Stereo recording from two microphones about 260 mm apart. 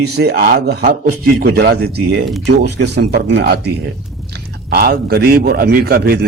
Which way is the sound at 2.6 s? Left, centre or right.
Right.